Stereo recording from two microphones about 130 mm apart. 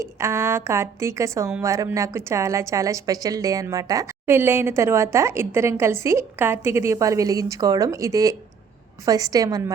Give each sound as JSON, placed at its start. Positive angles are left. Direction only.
{"t": 0.0, "sound": "a woman's voice", "side_deg": -20}